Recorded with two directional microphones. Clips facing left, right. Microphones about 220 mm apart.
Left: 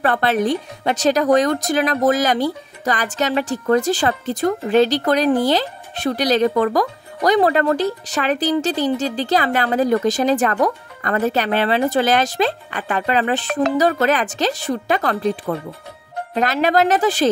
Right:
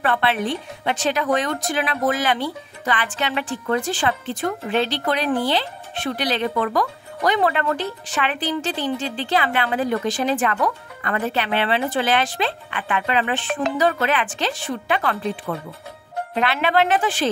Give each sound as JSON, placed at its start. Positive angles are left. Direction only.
{"t": 0.0, "sound": "speech", "side_deg": 40}